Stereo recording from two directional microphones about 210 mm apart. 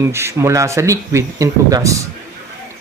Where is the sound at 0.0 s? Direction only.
15° right (ahead or behind).